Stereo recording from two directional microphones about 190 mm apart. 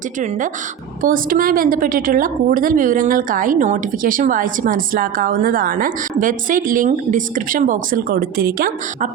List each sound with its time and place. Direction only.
0.2 s a woman's voice: 45° right (ahead or behind)